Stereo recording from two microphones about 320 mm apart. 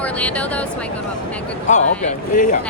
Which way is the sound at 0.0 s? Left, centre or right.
Centre.